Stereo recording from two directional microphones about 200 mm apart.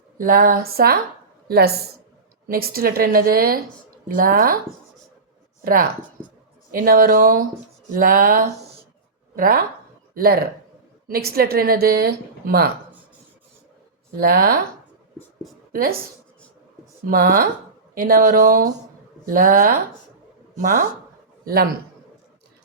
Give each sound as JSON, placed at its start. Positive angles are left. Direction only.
{"t": 0.2, "sound": "a woman's voice", "side_deg": -45}
{"t": 5.6, "sound": "a woman's voice", "side_deg": -45}
{"t": 14.2, "sound": "a woman's voice", "side_deg": -50}
{"t": 15.7, "sound": "speech", "side_deg": -45}
{"t": 17.1, "sound": "a woman's voice", "side_deg": -45}
{"t": 21.4, "sound": "a woman's voice", "side_deg": -50}